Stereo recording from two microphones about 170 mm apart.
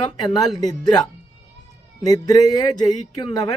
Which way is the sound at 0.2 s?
20° left (ahead or behind).